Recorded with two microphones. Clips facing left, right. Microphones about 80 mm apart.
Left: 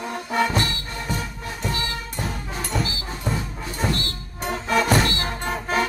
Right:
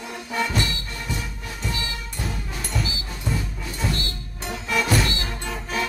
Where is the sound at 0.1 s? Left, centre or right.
Left.